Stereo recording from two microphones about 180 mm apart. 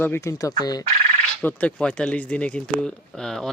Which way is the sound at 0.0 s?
15° left (ahead or behind).